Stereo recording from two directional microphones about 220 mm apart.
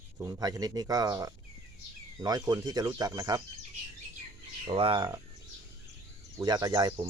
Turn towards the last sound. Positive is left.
turn(degrees=-20)  # may be behind; listen again after turning